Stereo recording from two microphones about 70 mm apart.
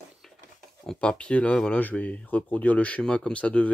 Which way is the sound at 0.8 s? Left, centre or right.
Centre.